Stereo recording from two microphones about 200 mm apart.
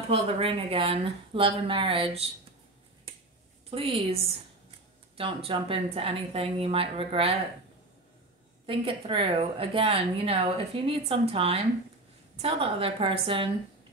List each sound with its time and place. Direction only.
0.1 s a woman's voice: 30° right (ahead or behind)
3.7 s a woman's voice: 30° right (ahead or behind)
8.6 s a woman's voice: 25° right (ahead or behind)